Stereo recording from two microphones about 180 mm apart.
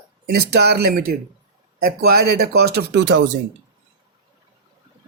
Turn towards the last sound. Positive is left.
turn(degrees=-70)  # may be behind; listen again after turning